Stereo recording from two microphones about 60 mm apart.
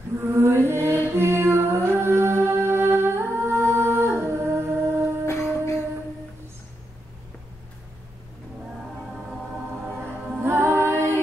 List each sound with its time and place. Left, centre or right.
0.2 s music: right
5.2 s humming: left
10.4 s a capella: right